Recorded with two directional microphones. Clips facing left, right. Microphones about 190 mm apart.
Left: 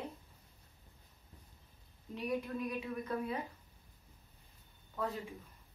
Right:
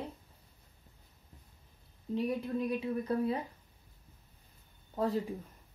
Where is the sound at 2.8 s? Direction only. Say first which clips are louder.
Right 7 dB; 30° right (ahead or behind).